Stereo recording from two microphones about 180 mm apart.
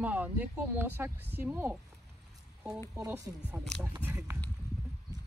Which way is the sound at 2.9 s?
15° right (ahead or behind).